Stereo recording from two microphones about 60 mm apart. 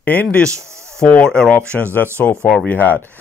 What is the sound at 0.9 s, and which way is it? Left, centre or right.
Speech, centre.